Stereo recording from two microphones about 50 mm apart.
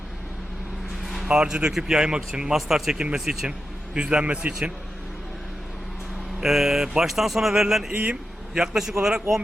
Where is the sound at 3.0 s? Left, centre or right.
Centre.